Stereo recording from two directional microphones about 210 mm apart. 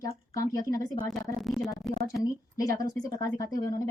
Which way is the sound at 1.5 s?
Centre (ahead or behind).